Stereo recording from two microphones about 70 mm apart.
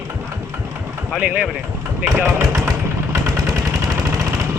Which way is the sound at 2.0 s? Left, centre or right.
Right.